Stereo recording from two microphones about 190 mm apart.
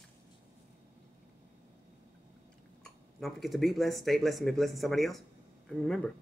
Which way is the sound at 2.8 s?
Centre (ahead or behind).